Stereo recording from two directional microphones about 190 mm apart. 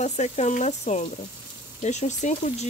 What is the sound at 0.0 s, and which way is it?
Speech, 35° left (ahead or behind).